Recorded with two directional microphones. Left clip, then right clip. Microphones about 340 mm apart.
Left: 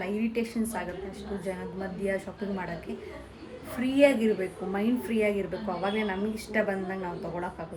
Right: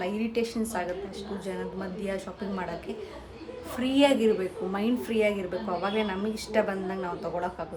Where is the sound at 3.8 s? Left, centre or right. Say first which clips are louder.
Even; centre.